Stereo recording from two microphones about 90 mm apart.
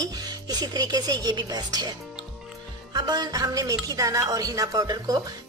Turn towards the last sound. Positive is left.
turn(degrees=-45)  # may be behind; listen again after turning